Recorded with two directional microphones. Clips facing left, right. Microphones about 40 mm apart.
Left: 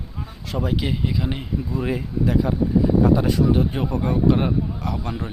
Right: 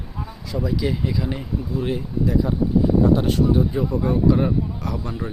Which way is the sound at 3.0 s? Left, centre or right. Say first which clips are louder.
Even; left.